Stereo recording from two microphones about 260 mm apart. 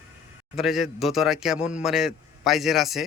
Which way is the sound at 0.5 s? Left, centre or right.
Centre.